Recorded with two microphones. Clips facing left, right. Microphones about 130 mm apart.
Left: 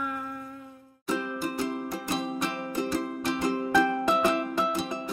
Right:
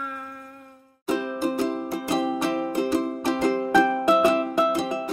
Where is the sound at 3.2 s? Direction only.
50° right (ahead or behind).